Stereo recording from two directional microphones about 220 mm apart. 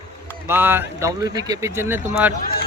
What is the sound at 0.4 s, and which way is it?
Speech, 10° right (ahead or behind).